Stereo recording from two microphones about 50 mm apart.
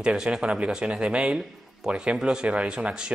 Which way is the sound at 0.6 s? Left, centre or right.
Right.